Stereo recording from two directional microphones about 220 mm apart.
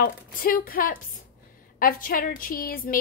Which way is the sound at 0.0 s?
40° left (ahead or behind).